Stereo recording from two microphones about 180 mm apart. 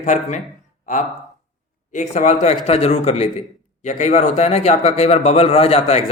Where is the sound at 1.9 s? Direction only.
45° left (ahead or behind).